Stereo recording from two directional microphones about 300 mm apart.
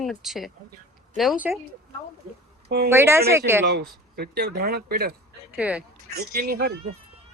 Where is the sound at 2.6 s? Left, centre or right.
Right.